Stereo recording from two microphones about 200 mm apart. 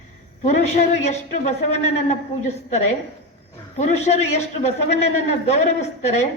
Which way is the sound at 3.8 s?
35° left (ahead or behind).